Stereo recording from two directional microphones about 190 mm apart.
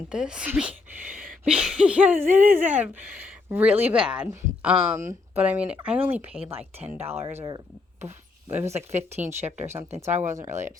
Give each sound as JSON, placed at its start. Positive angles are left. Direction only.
{"t": 0.1, "sound": "speech", "side_deg": -5}
{"t": 8.0, "sound": "a sound", "side_deg": -15}
{"t": 8.7, "sound": "speech", "side_deg": -35}